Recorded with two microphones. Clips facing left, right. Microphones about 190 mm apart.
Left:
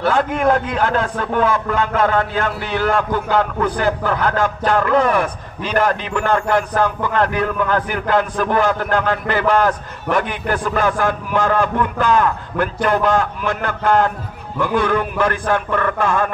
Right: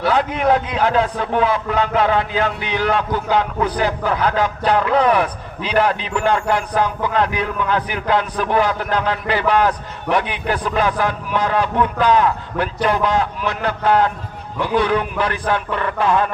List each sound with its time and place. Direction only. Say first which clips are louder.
0.0 s a man's voice: left 1 dB; 50° left (ahead or behind)